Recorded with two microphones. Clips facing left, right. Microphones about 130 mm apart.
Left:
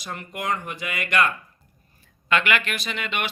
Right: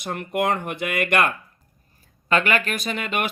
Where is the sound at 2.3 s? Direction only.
40° right (ahead or behind).